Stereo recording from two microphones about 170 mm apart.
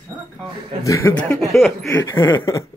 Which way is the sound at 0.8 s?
15° left (ahead or behind).